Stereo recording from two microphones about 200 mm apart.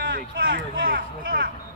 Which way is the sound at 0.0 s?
45° right (ahead or behind).